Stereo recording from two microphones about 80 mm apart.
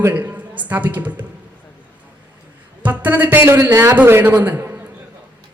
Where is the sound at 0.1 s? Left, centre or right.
Right.